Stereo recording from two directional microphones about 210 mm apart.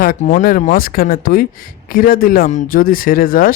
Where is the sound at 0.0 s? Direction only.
40° left (ahead or behind).